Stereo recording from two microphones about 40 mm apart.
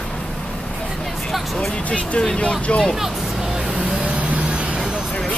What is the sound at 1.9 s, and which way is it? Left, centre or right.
Speech, left.